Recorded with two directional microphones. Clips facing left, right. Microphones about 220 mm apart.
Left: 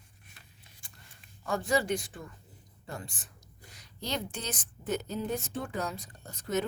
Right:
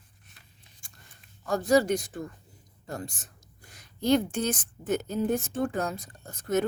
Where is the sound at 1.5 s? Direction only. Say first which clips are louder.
Right 6 dB; 40° right (ahead or behind).